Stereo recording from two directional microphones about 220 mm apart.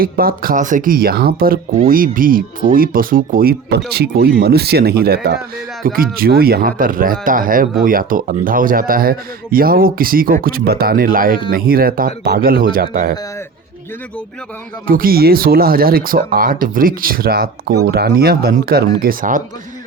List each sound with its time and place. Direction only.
0.0 s speech: 40° right (ahead or behind)
14.8 s speech: 40° right (ahead or behind)